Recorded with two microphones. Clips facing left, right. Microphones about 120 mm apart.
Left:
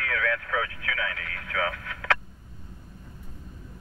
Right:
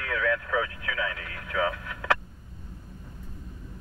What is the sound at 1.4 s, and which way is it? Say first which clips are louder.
Radio: right 2 dB; 20° right (ahead or behind).